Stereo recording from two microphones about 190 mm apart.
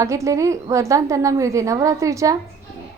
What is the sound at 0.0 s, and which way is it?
A woman's voice, 15° right (ahead or behind).